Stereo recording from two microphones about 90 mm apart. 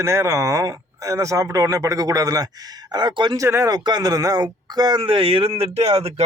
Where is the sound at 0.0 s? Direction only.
30° right (ahead or behind).